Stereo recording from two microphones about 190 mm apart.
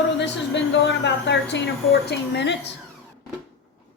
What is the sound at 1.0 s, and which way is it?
A woman's voice, 65° left (ahead or behind).